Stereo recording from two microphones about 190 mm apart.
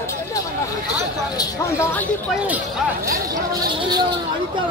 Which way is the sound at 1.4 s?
15° left (ahead or behind).